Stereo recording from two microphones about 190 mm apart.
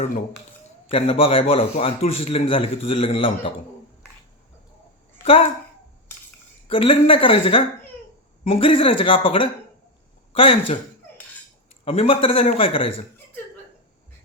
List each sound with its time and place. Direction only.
0.9 s a man's voice: 30° left (ahead or behind)
5.2 s a woman's voice: 30° left (ahead or behind)
6.7 s a man's voice: 30° left (ahead or behind)
11.9 s a man's voice: 30° left (ahead or behind)